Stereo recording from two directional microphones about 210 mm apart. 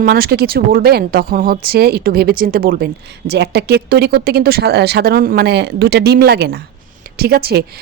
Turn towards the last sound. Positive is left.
turn(degrees=-50)  # may be behind; listen again after turning